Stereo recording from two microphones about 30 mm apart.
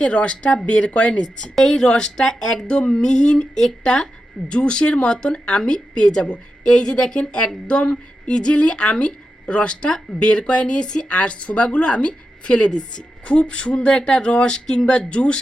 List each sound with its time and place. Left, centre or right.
0.1 s speech: left
1.2 s speech: centre
2.6 s a woman's voice: left
11.2 s a woman's voice: left